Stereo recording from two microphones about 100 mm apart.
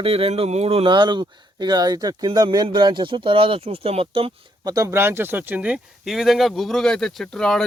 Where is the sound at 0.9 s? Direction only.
50° right (ahead or behind); by 4.3 s 70° right (ahead or behind).